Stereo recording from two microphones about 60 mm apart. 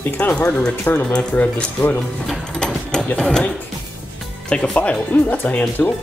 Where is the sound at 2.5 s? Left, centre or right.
Centre.